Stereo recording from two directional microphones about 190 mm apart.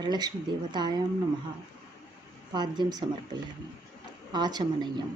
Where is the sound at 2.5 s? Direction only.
20° right (ahead or behind).